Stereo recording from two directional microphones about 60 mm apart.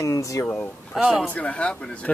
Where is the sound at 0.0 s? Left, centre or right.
Left.